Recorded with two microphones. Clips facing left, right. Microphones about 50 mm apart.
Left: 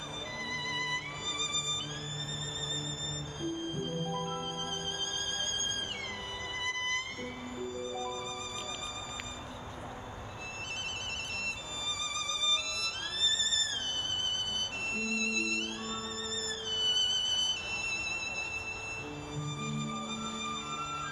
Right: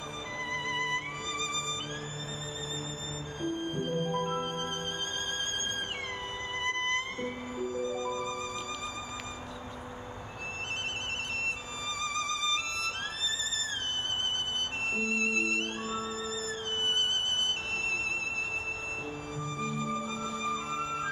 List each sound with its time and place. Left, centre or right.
0.5 s music: right
3.3 s music: right
6.6 s music: right
12.0 s violin: right
14.9 s music: right
19.3 s music: right